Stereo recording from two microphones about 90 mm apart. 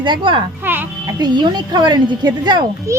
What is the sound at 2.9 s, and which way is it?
Speech, 35° right (ahead or behind).